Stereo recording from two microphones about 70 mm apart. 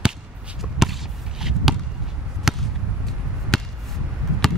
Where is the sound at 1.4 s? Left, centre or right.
Centre.